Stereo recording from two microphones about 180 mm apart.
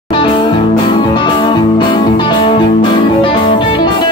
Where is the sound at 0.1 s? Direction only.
30° left (ahead or behind).